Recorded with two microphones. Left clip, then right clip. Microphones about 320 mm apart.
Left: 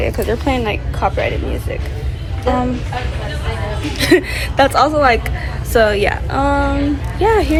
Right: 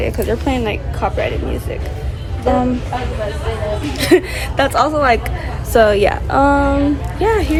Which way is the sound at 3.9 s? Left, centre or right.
Centre.